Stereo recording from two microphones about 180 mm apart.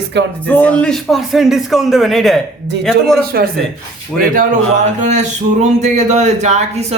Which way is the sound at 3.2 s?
60° right (ahead or behind).